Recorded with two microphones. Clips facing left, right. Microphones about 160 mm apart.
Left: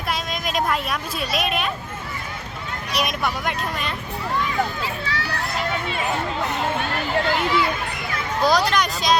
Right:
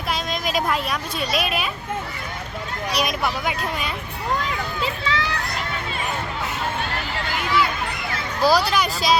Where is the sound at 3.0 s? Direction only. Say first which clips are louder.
Even; centre (ahead or behind).